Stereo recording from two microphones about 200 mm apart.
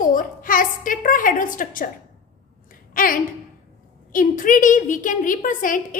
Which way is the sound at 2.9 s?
45° left (ahead or behind).